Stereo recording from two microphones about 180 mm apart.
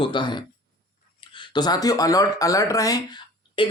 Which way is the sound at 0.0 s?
25° left (ahead or behind).